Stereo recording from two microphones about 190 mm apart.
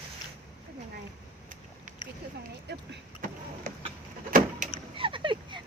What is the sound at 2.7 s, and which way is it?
Speech, 60° right (ahead or behind).